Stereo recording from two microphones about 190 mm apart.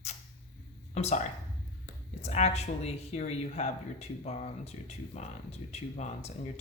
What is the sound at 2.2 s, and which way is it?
Speech, 35° left (ahead or behind).